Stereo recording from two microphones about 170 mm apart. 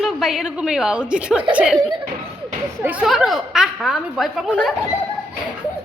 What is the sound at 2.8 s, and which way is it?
A woman's voice, 5° right (ahead or behind).